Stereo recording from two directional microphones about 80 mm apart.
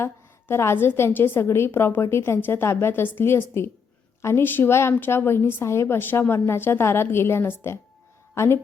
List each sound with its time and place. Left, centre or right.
0.0 s a woman's voice: left